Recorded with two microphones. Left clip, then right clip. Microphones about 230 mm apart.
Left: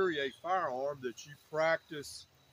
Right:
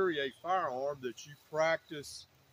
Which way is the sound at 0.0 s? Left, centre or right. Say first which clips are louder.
Even; centre.